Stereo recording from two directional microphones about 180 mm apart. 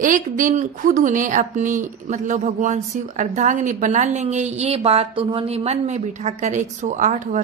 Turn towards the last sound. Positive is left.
turn(degrees=-45)  # may be behind; listen again after turning